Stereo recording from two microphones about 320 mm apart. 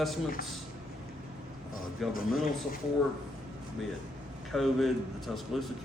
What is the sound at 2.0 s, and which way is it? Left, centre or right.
Speech, centre.